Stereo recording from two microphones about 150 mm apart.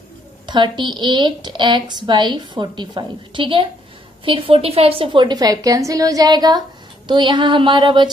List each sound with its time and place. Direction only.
0.5 s a woman's voice: 30° right (ahead or behind)